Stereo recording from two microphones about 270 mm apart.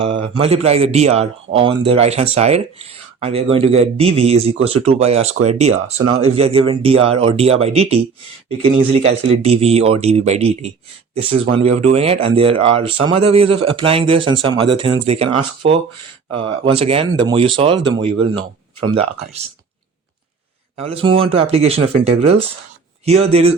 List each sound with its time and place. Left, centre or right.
0.0 s speech: centre
5.7 s speech: right
6.3 s speech: right
20.7 s speech: right